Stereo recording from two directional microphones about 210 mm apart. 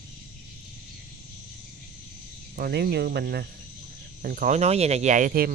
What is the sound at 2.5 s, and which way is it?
Speech, 45° right (ahead or behind).